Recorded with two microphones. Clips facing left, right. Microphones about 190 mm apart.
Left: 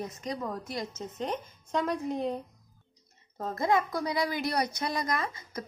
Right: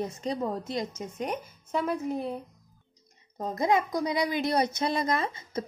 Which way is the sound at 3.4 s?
15° right (ahead or behind).